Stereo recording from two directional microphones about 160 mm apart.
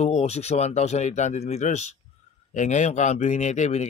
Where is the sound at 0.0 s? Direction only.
45° left (ahead or behind).